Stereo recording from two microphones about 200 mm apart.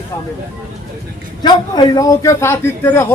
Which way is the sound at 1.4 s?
20° left (ahead or behind).